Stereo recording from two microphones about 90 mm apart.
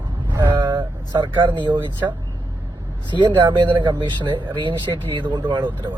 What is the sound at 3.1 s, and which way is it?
Speech, 60° right (ahead or behind).